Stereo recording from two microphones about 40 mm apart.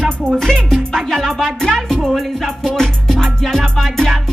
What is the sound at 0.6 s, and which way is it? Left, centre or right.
Music, centre.